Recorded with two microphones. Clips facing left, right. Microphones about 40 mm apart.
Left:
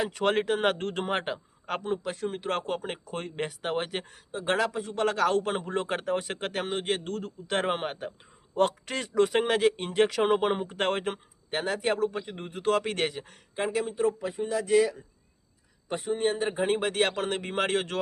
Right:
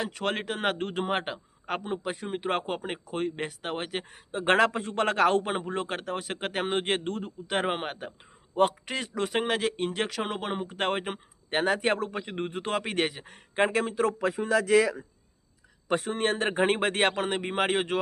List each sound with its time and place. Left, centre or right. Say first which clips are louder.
0.0 s a man's voice: left 4 dB; centre
4.3 s a man's voice: right 5 dB; right
5.5 s a man's voice: left 1 dB; centre
6.7 s a man's voice: right 4 dB; right
7.4 s a man's voice: even; centre
11.5 s a man's voice: right 3 dB; right
12.7 s speech: even; centre
13.6 s speech: right 4 dB; right
13.9 s speech: right 1 dB; right
15.9 s a man's voice: right 1 dB; right
17.2 s speech: right 1 dB; centre